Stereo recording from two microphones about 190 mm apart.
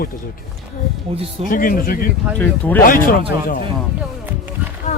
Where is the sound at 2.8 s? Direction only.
45° left (ahead or behind).